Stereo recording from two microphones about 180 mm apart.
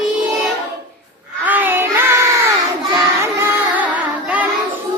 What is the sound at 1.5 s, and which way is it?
Child singing, 10° right (ahead or behind).